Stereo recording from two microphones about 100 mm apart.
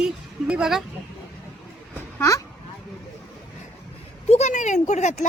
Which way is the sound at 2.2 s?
35° left (ahead or behind).